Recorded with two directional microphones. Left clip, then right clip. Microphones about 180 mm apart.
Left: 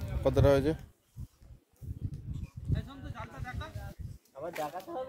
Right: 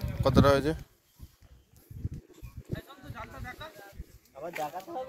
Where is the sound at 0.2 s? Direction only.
10° left (ahead or behind).